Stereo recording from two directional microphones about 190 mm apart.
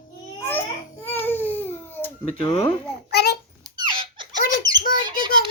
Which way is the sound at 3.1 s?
60° left (ahead or behind).